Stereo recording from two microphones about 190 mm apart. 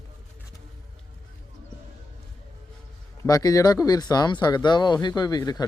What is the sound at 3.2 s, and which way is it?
Speech, 20° left (ahead or behind).